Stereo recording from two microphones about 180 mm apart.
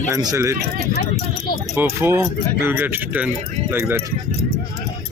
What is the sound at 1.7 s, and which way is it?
Speech, 15° right (ahead or behind).